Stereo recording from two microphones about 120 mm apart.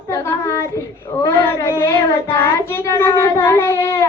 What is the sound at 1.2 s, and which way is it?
Child singing, 20° left (ahead or behind).